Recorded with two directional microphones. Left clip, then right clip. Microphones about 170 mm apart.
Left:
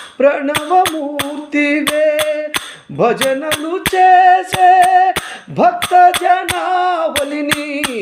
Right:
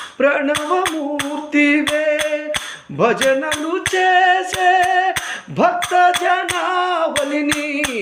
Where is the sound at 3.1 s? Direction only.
70° left (ahead or behind).